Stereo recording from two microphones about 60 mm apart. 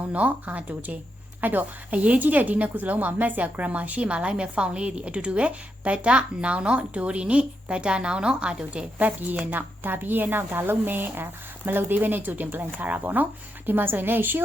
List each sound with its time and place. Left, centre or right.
0.1 s a woman's voice: right